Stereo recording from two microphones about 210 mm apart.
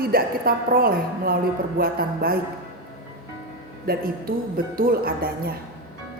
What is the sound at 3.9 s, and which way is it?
A woman's voice, 45° right (ahead or behind).